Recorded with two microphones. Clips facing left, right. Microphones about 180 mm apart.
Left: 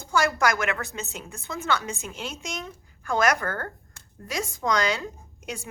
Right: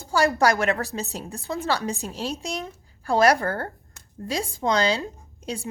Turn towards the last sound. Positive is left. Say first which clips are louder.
# right 5 dB
turn(degrees=-30)  # may be behind; listen again after turning